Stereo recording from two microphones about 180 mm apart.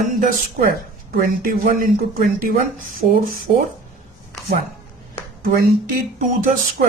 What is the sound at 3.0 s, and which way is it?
Speech, 40° right (ahead or behind).